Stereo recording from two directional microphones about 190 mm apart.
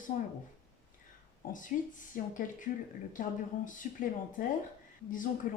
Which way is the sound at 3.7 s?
45° left (ahead or behind).